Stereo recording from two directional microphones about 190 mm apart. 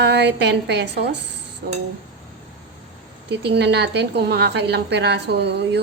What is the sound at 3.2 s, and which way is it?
A woman's voice, 65° right (ahead or behind).